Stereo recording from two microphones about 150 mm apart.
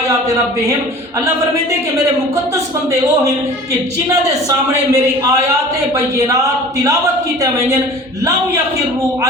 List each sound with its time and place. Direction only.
3.2 s a man's voice: 20° right (ahead or behind)